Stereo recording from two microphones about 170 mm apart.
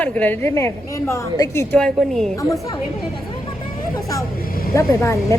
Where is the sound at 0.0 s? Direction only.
10° left (ahead or behind).